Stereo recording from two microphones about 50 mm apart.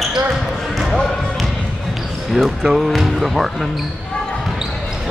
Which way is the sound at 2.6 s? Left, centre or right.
Centre.